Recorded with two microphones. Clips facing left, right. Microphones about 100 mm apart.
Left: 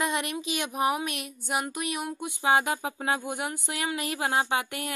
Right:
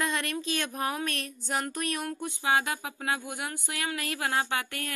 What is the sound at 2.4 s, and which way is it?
Speech, 25° left (ahead or behind).